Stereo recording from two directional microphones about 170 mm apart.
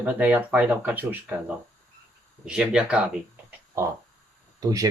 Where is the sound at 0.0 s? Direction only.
10° right (ahead or behind).